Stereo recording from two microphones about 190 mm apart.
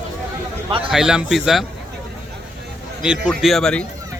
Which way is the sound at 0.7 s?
25° right (ahead or behind).